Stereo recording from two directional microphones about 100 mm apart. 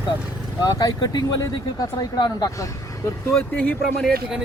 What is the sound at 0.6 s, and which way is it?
Speech, 40° left (ahead or behind).